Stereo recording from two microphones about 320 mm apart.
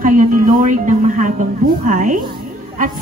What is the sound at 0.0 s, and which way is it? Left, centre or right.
A woman's voice, right.